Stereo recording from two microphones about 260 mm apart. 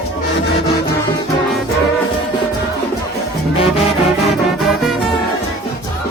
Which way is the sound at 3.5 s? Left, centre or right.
Left.